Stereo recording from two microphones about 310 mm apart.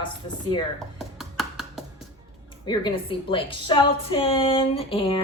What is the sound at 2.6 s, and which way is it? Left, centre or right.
A woman's voice, centre.